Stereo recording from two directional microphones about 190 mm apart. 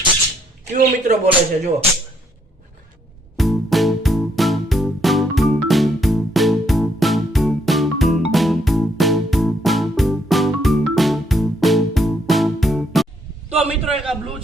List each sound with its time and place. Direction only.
0.7 s speech: 40° right (ahead or behind)
3.3 s music: centre (ahead or behind)
13.5 s a man's voice: 5° right (ahead or behind)